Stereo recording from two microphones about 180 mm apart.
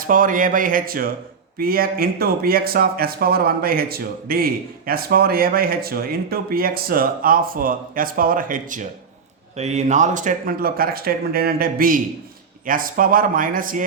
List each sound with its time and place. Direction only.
0.0 s speech: 50° right (ahead or behind)